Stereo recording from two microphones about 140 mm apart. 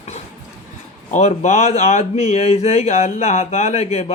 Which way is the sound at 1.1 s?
55° left (ahead or behind).